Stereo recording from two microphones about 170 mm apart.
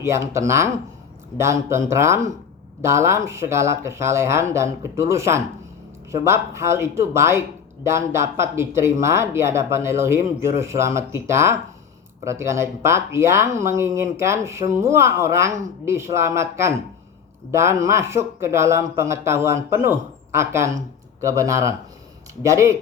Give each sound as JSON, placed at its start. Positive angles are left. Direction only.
{"t": 0.0, "sound": "speech", "side_deg": -15}